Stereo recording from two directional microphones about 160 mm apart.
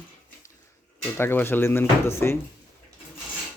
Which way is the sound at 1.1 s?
15° left (ahead or behind).